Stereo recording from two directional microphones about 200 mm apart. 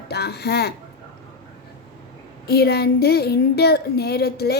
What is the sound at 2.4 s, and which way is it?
A woman's voice, 55° left (ahead or behind).